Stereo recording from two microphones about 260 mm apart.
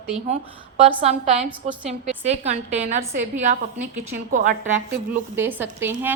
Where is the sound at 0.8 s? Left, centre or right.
Right.